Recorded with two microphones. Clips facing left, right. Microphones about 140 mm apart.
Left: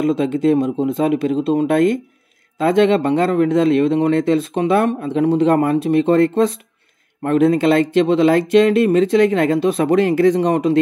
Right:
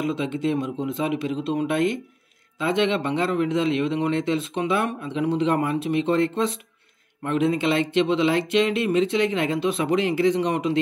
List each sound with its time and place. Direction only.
0.0 s speech: 40° left (ahead or behind)